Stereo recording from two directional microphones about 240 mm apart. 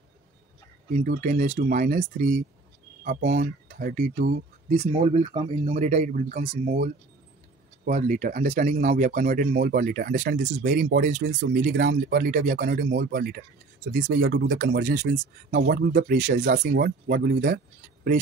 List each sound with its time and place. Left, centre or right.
0.9 s speech: right
7.8 s speech: right